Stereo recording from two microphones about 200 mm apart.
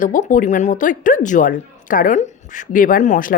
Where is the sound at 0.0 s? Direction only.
40° left (ahead or behind).